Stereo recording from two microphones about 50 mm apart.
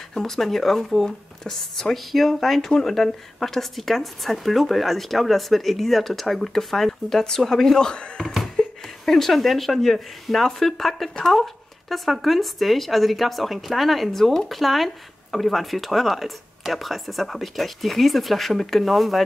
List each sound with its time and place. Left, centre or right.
0.1 s speech: centre
8.2 s a sound: centre
8.5 s speech: centre